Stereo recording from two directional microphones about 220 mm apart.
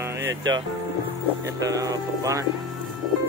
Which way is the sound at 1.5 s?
15° right (ahead or behind).